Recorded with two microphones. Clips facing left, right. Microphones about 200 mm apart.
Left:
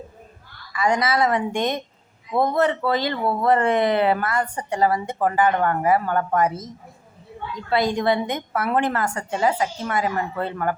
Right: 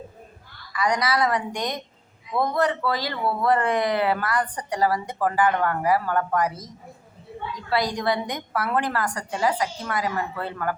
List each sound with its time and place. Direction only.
0.7 s speech: 25° left (ahead or behind)
7.7 s speech: 25° left (ahead or behind)